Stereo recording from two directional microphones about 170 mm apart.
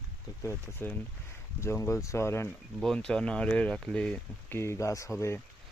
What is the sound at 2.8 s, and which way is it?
Speech, 5° left (ahead or behind).